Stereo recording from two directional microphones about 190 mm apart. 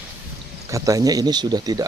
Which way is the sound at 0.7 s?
15° right (ahead or behind).